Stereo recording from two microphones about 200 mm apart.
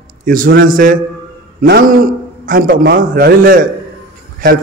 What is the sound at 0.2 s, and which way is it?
A man's voice, 45° right (ahead or behind).